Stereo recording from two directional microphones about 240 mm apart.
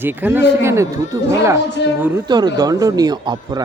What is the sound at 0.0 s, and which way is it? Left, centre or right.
A man's voice, centre.